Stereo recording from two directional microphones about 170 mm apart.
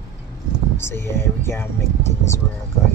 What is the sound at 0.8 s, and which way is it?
Speech, 15° left (ahead or behind).